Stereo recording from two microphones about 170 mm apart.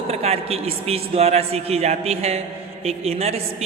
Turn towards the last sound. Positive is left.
turn(degrees=-35)  # may be behind; listen again after turning